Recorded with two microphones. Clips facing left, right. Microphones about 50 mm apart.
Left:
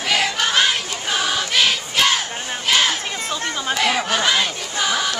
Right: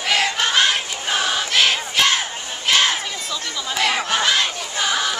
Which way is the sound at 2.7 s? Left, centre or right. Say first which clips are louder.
Right 1 dB; centre.